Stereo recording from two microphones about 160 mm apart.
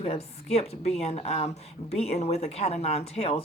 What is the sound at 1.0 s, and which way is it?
Speech, 40° left (ahead or behind).